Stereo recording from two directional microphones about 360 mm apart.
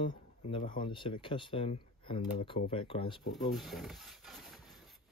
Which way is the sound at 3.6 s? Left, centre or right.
Centre.